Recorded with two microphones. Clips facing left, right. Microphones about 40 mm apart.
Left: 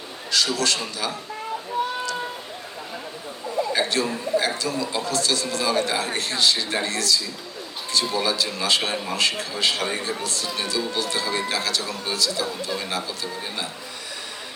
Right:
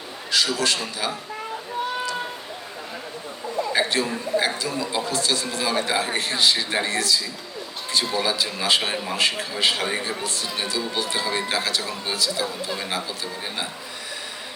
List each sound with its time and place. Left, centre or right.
0.3 s a man's voice: centre
3.7 s a man's voice: centre